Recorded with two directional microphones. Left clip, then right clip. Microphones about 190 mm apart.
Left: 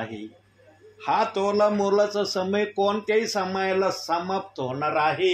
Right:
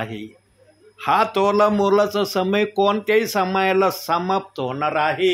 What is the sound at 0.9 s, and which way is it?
Speech, 40° right (ahead or behind).